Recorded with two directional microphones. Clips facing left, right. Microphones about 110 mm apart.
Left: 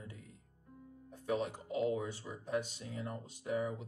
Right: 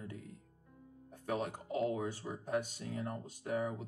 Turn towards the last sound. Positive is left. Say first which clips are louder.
# even
turn(degrees=-45)  # may be behind; listen again after turning